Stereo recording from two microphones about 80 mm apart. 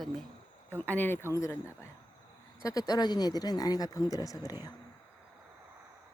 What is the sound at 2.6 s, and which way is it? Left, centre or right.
Speech, left.